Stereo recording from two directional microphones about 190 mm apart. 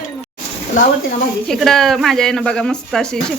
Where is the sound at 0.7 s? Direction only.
45° left (ahead or behind).